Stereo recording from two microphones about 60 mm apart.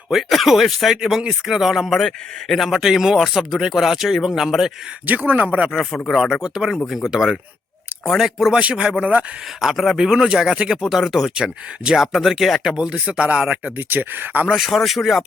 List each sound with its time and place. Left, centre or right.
0.1 s speech: centre
2.0 s a man's voice: centre
2.6 s speech: centre
5.0 s speech: right
5.7 s speech: centre
6.1 s speech: centre
9.6 s speech: centre
12.7 s speech: centre
13.7 s speech: right
14.5 s speech: centre